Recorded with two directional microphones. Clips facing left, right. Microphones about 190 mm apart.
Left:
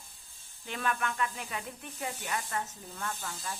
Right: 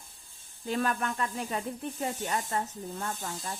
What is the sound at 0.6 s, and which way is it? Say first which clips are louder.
Speech: right 4 dB; 35° right (ahead or behind).